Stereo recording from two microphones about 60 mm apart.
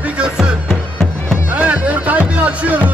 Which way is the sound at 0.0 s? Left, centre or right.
Centre.